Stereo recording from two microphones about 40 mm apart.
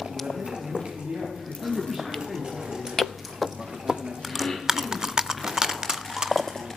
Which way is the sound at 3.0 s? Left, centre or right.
Centre.